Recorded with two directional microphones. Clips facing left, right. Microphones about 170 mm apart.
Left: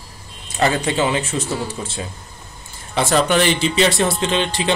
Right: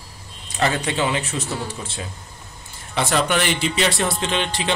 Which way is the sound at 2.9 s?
35° left (ahead or behind).